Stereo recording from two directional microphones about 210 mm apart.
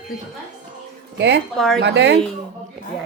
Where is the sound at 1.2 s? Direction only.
55° right (ahead or behind).